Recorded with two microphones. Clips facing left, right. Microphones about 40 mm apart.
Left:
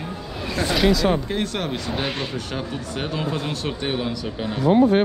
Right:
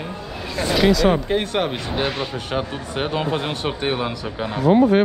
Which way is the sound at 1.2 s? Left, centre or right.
Right.